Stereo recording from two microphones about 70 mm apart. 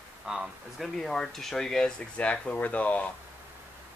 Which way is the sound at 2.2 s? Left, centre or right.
Centre.